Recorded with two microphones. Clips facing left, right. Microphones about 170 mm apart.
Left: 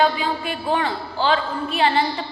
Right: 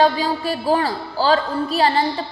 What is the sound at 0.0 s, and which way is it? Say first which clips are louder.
A man's voice: right 3 dB; 35° right (ahead or behind).